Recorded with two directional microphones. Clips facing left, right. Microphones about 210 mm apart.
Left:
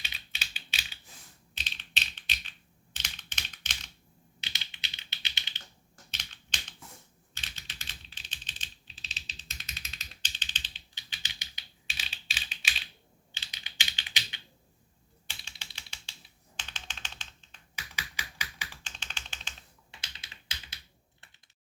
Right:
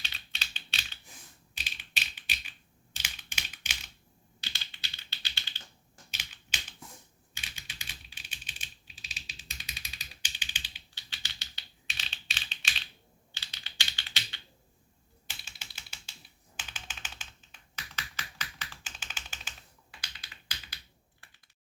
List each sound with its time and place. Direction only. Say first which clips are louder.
0.0 s typing: even; 5° left (ahead or behind)
1.5 s typing: left 1 dB; 10° right (ahead or behind)
2.9 s computer keyboard: right 1 dB; 10° right (ahead or behind)
4.4 s typing: even; 20° left (ahead or behind)
6.1 s typing: even; 10° right (ahead or behind)
10.9 s typing: left 1 dB; 15° left (ahead or behind)
13.3 s computer keyboard: left 1 dB; 15° left (ahead or behind)
15.3 s typing: even; 5° right (ahead or behind)
17.9 s a sound: left 1 dB; 10° left (ahead or behind)
18.8 s typing: even; 5° right (ahead or behind)
19.9 s computer keyboard: even; 25° left (ahead or behind)